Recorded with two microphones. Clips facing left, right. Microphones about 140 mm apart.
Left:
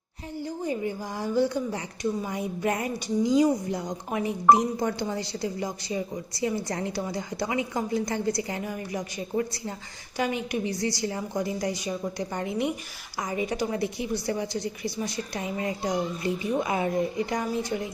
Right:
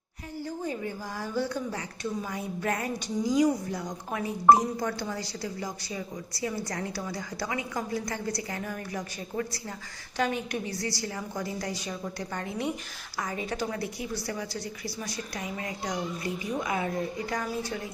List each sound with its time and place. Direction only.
0.4 s a woman's voice: 15° left (ahead or behind)
10.2 s a woman's voice: 10° left (ahead or behind)